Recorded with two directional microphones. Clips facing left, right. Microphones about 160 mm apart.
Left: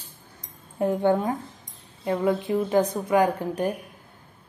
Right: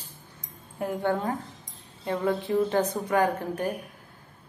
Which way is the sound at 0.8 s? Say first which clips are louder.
Left 6 dB; 20° left (ahead or behind).